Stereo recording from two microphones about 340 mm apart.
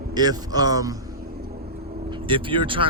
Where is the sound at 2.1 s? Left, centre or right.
Centre.